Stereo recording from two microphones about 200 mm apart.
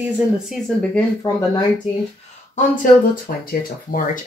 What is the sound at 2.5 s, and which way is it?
Speech, 40° left (ahead or behind).